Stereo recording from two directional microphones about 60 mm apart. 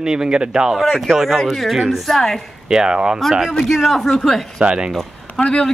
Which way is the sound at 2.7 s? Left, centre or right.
Centre.